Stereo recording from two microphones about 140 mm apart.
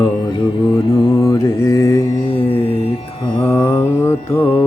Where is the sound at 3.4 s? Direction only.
15° left (ahead or behind).